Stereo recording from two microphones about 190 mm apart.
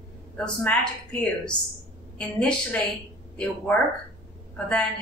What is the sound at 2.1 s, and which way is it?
Speech, 5° left (ahead or behind).